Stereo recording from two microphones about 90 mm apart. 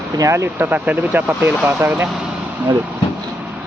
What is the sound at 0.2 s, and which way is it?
Speech, 30° right (ahead or behind).